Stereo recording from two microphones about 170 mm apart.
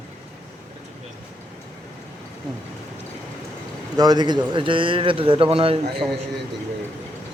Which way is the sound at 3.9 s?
25° right (ahead or behind).